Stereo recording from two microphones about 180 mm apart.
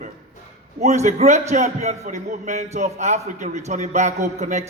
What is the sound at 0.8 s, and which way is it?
A man's voice, 40° right (ahead or behind).